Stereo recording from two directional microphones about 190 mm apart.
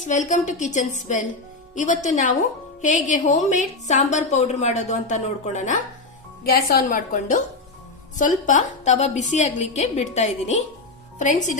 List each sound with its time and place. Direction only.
0.1 s a woman's voice: 40° left (ahead or behind)
6.4 s a woman's voice: 50° left (ahead or behind)